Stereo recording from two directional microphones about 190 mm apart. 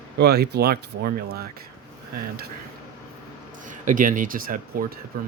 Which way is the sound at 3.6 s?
45° right (ahead or behind).